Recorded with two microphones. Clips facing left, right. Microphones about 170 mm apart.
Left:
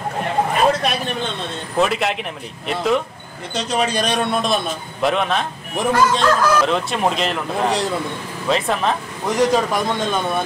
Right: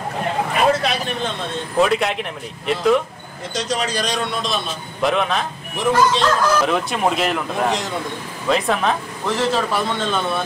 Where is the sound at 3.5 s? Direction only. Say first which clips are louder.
Left 2 dB; 60° left (ahead or behind).